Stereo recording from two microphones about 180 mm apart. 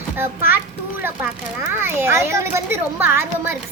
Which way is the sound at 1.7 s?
10° right (ahead or behind).